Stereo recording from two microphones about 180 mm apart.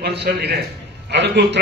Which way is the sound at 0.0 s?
65° right (ahead or behind).